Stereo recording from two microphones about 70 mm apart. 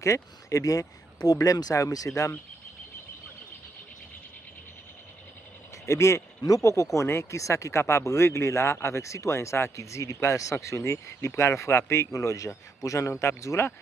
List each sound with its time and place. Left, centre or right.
0.0 s speech: left
2.0 s speech: left
5.9 s speech: left